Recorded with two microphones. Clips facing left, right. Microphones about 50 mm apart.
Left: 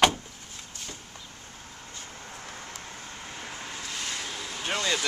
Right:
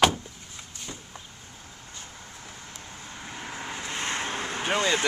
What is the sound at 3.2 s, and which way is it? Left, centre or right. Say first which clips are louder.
Vehicle: right 4 dB; centre.